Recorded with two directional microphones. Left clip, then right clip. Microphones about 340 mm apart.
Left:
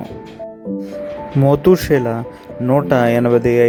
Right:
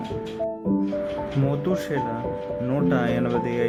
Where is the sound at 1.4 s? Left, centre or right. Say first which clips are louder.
Left 16 dB; centre.